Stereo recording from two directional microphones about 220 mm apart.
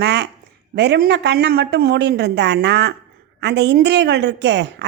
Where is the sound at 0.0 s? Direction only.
50° right (ahead or behind).